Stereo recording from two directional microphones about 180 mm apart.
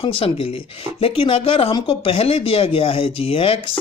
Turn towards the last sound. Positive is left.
turn(degrees=30)  # may be behind; listen again after turning